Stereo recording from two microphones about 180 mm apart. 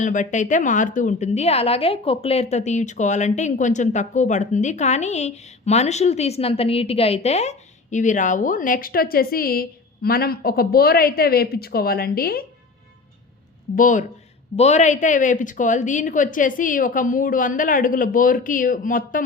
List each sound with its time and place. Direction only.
0.0 s a woman's voice: 45° left (ahead or behind)
13.7 s a woman's voice: 45° left (ahead or behind)